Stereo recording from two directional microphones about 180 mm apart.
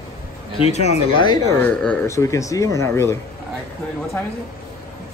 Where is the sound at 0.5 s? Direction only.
35° left (ahead or behind).